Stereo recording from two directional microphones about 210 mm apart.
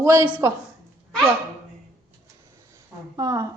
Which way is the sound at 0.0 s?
15° right (ahead or behind).